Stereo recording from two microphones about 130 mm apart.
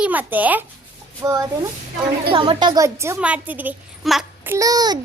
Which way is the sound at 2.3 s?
40° right (ahead or behind).